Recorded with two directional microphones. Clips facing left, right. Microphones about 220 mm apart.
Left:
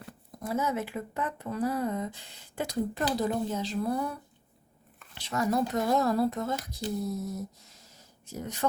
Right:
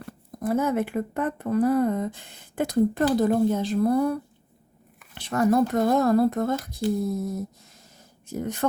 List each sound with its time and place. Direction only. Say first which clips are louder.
0.3 s speech: right 7 dB; 55° right (ahead or behind)
5.1 s speech: right 7 dB; 55° right (ahead or behind)
8.3 s speech: right 8 dB; 55° right (ahead or behind)